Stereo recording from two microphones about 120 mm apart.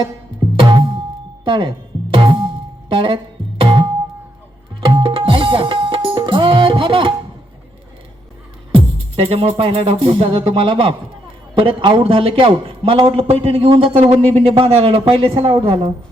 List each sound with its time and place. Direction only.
0.6 s music: 45° right (ahead or behind)
2.9 s a man's voice: 45° right (ahead or behind)
3.6 s music: 40° right (ahead or behind)
8.7 s music: 50° right (ahead or behind)
11.5 s a man's voice: 45° right (ahead or behind)